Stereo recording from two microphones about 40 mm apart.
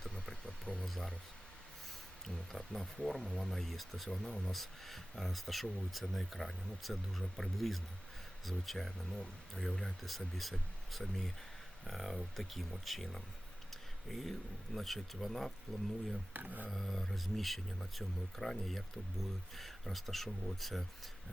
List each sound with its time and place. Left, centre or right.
0.4 s a sound: centre
2.2 s speech: centre
3.5 s speech: centre
4.2 s speech: centre
4.5 s speech: centre
16.3 s speech: right
16.6 s speech: centre